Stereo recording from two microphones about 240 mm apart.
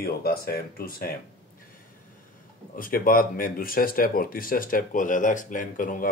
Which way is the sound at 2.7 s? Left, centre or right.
Left.